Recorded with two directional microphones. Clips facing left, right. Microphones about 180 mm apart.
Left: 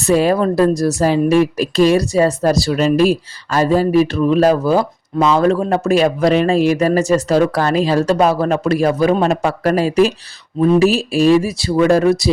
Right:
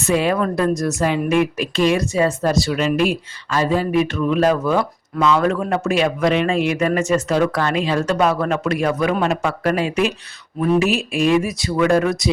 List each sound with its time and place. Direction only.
0.1 s speech: 40° left (ahead or behind)